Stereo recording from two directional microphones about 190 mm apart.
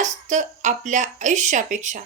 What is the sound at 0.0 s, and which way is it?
A woman's voice, 40° right (ahead or behind).